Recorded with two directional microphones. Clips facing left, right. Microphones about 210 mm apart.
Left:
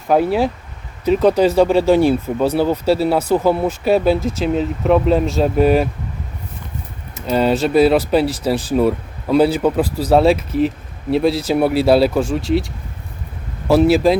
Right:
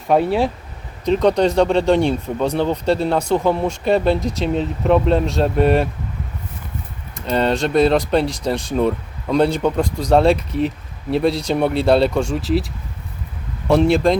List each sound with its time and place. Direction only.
0.1 s speech: centre (ahead or behind)
7.3 s speech: 5° left (ahead or behind)